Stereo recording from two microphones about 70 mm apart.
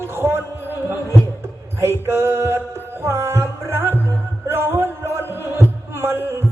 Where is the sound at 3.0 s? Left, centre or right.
Right.